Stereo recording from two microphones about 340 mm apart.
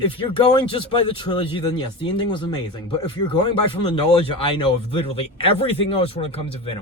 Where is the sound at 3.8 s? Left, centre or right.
Centre.